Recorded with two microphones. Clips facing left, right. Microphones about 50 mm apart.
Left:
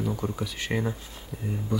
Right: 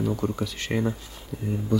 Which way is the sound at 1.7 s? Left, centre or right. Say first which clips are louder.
Right 5 dB; left.